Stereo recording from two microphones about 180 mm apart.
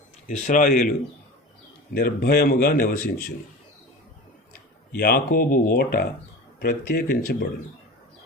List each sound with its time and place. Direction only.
0.3 s speech: 45° left (ahead or behind)
4.9 s speech: 55° left (ahead or behind)